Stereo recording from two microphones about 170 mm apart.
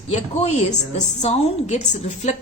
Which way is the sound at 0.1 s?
40° left (ahead or behind).